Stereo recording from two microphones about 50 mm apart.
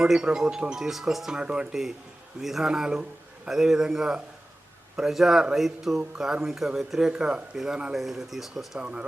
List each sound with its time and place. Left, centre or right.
0.0 s speech: centre
1.4 s speech: centre
2.4 s a man's voice: centre
8.8 s speech: right